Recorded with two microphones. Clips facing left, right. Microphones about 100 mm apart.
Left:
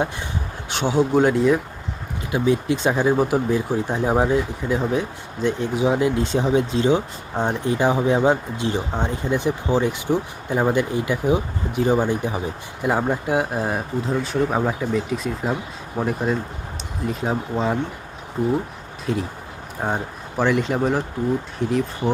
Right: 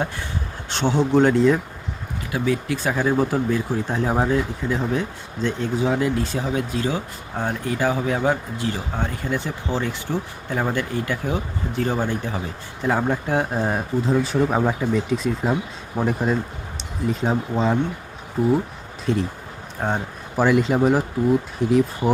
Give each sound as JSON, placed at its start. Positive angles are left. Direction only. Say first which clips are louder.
{"t": 0.7, "sound": "speech", "louder": "even", "side_deg": 10}
{"t": 2.3, "sound": "speech", "louder": "left 3 dB", "side_deg": 20}
{"t": 19.1, "sound": "speech", "louder": "right 2 dB", "side_deg": 0}
{"t": 20.3, "sound": "speech", "louder": "right 2 dB", "side_deg": -5}